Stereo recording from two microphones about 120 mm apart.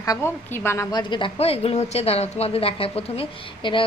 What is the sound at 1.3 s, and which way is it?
A woman's voice, 55° left (ahead or behind).